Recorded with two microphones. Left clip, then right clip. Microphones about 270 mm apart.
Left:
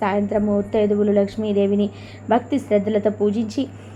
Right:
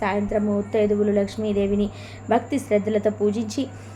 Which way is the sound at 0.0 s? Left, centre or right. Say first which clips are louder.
Left 3 dB; centre.